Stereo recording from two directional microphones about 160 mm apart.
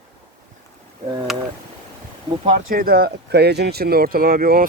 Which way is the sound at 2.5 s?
60° right (ahead or behind).